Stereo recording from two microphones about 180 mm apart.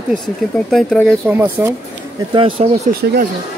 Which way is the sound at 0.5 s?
5° left (ahead or behind).